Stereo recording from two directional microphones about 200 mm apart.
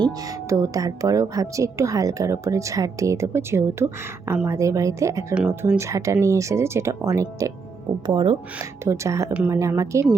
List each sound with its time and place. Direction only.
0.0 s speech: 15° right (ahead or behind)